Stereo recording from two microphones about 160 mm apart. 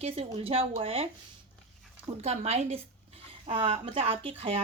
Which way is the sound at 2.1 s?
45° right (ahead or behind).